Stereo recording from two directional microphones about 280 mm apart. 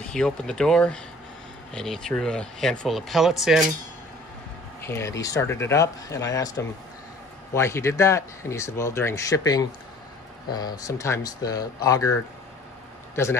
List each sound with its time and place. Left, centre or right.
0.1 s speech: centre
4.8 s a man's voice: centre